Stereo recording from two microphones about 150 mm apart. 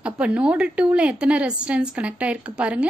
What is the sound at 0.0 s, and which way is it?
A woman's voice, 10° right (ahead or behind).